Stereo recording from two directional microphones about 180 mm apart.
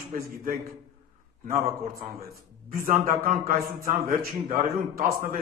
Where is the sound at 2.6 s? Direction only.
50° right (ahead or behind).